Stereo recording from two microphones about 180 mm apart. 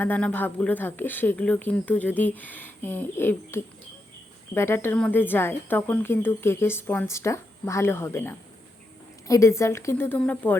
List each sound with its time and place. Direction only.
0.0 s speech: 10° left (ahead or behind)